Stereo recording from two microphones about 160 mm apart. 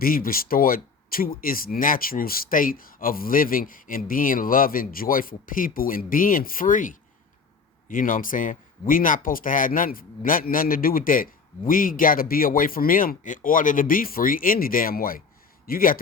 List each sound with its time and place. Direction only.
0.0 s speech: 65° left (ahead or behind)